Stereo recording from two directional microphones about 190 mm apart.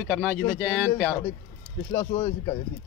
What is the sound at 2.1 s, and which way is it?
Speech, 25° left (ahead or behind).